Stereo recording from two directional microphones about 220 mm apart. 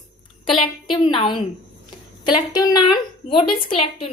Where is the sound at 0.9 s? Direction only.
20° left (ahead or behind).